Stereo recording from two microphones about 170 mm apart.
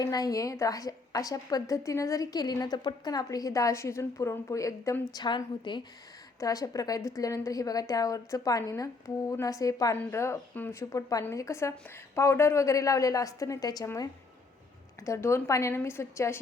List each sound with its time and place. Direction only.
0.0 s a woman's voice: 20° left (ahead or behind)